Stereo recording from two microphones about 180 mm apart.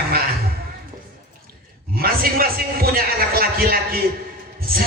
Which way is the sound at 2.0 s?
55° right (ahead or behind).